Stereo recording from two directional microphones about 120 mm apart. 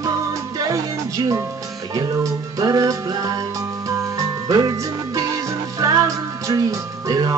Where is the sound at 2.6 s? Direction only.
30° right (ahead or behind).